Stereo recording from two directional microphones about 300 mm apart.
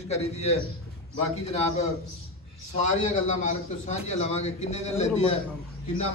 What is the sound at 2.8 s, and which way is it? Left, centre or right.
A man's voice, left.